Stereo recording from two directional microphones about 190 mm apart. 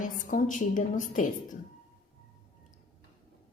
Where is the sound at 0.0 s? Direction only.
45° left (ahead or behind).